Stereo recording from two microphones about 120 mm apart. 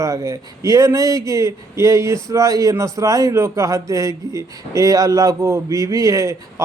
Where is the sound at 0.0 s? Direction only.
25° right (ahead or behind).